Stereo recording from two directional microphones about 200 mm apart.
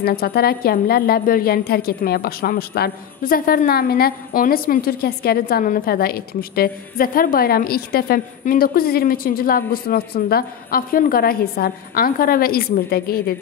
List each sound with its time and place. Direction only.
0.0 s a woman's voice: 50° left (ahead or behind)